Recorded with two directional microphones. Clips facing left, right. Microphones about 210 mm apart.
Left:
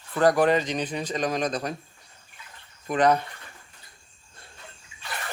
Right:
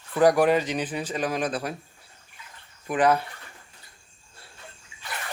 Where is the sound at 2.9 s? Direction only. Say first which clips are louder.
Even; 5° right (ahead or behind).